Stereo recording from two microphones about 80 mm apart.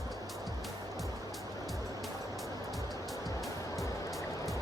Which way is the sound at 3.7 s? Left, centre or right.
Left.